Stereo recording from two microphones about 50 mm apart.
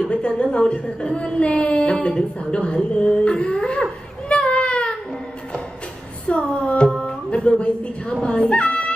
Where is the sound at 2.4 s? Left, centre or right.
Left.